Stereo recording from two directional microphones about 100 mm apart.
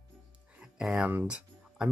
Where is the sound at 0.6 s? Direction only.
10° right (ahead or behind).